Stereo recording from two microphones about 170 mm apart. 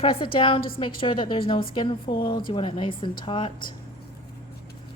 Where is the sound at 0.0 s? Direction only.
30° left (ahead or behind).